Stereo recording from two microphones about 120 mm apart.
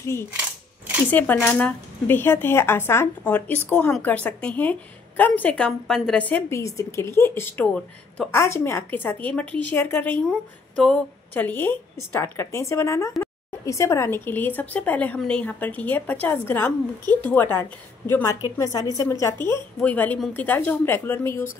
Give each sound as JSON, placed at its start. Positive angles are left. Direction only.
{"t": 0.0, "sound": "a woman's voice", "side_deg": 20}
{"t": 0.3, "sound": "coin", "side_deg": -10}
{"t": 1.1, "sound": "speech", "side_deg": 15}
{"t": 5.7, "sound": "a woman's voice", "side_deg": 0}
{"t": 6.5, "sound": "a woman's voice", "side_deg": 25}
{"t": 18.1, "sound": "a woman's voice", "side_deg": 25}